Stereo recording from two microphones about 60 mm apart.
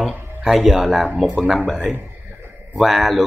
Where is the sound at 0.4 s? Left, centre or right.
Centre.